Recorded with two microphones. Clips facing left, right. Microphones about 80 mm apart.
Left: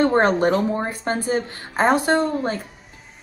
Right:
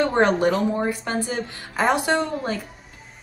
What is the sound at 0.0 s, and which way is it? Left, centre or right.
A woman's voice, left.